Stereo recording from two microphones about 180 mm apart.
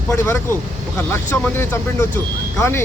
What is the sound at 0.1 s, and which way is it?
A man's voice, 15° left (ahead or behind).